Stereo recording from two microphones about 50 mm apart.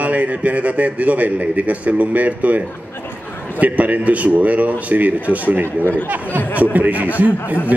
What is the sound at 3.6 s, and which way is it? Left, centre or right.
A man's voice, right.